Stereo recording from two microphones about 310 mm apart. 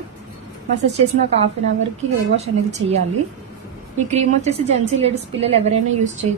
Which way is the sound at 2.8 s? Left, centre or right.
Right.